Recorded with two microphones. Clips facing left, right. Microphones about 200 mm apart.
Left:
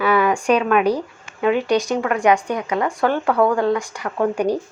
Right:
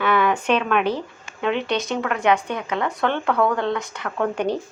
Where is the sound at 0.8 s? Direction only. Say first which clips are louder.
Left 4 dB; 40° left (ahead or behind).